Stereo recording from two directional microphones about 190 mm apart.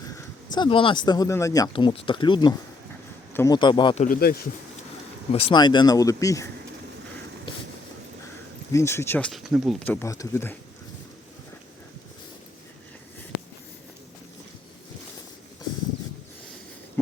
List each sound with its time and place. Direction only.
0.1 s speech: 25° left (ahead or behind)
4.0 s speech: 50° left (ahead or behind)
5.3 s speech: 30° left (ahead or behind)
8.7 s speech: 15° left (ahead or behind)
9.8 s speech: 10° left (ahead or behind)